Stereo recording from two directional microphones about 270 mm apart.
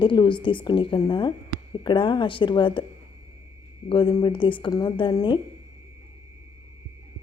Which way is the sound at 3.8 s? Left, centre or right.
Centre.